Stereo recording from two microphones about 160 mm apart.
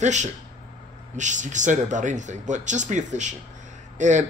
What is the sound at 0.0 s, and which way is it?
Speech, 50° right (ahead or behind).